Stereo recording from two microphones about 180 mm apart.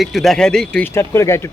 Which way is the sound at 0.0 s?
Centre (ahead or behind).